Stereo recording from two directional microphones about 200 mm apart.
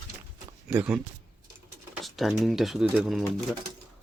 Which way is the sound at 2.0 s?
Centre (ahead or behind).